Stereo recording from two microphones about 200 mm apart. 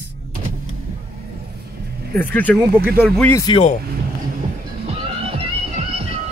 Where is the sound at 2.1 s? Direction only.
10° left (ahead or behind).